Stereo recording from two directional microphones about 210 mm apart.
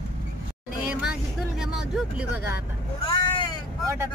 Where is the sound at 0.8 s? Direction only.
5° right (ahead or behind).